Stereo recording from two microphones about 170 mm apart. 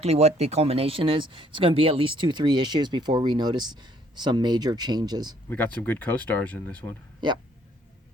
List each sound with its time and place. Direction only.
0.0 s speech: 40° right (ahead or behind)
5.5 s speech: 10° left (ahead or behind)